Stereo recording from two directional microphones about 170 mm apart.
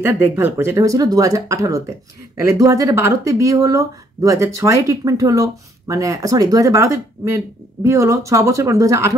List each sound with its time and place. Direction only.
0.0 s speech: 15° right (ahead or behind)